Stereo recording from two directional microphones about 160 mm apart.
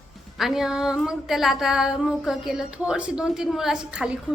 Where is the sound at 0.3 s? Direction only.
Centre (ahead or behind).